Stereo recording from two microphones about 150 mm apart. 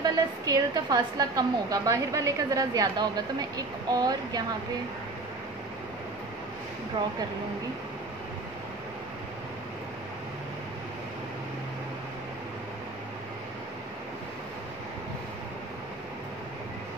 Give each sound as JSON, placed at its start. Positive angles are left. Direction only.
{"t": 0.0, "sound": "a woman's voice", "side_deg": -25}